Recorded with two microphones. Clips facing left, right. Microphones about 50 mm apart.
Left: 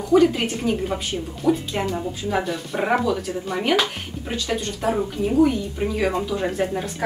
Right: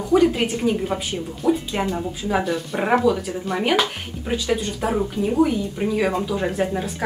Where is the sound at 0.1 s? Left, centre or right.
Centre.